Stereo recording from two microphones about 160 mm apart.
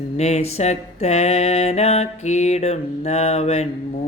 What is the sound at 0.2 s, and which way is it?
Mantra, 40° left (ahead or behind).